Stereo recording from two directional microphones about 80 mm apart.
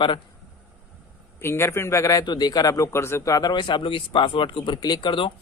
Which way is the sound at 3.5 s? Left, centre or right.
Left.